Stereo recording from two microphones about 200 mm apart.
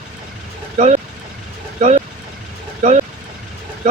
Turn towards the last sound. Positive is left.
turn(degrees=-35)  # may be behind; listen again after turning